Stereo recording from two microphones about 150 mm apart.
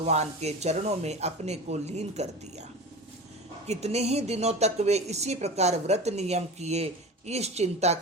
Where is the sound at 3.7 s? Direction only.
45° right (ahead or behind).